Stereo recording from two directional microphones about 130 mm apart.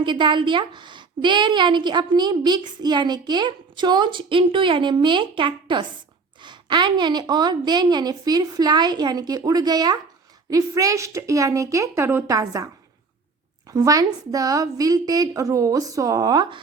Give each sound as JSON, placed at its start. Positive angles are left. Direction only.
{"t": 0.0, "sound": "a woman's voice", "side_deg": -40}
{"t": 13.7, "sound": "a woman's voice", "side_deg": -25}